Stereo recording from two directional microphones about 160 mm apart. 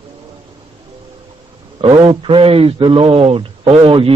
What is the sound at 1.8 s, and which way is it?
A man's voice, 30° right (ahead or behind).